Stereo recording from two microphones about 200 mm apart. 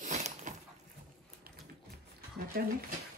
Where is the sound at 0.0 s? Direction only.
35° right (ahead or behind).